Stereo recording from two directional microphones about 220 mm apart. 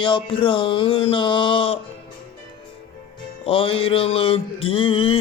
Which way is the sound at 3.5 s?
25° left (ahead or behind).